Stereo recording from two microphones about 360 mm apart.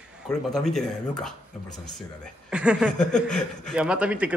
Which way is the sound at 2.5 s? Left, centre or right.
Centre.